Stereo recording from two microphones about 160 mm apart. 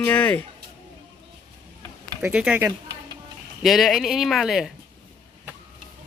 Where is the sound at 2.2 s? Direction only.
10° right (ahead or behind).